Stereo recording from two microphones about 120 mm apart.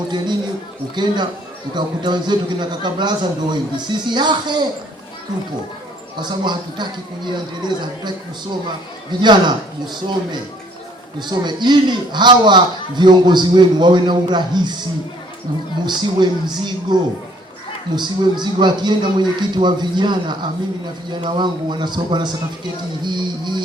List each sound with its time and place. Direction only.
0.9 s a man's voice: 35° right (ahead or behind)
6.1 s a man's voice: 40° right (ahead or behind)
9.2 s a man's voice: 40° right (ahead or behind)
15.9 s a man's voice: 40° right (ahead or behind)